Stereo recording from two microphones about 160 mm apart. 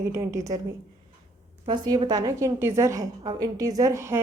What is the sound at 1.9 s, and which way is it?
A woman's voice, 25° right (ahead or behind).